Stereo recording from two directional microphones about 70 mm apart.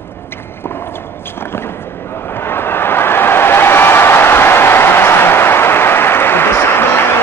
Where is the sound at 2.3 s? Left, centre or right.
Left.